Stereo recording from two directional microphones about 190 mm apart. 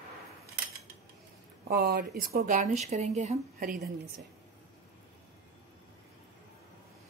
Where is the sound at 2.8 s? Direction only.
35° right (ahead or behind).